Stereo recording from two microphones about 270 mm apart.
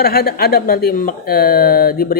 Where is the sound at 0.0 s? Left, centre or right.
Left.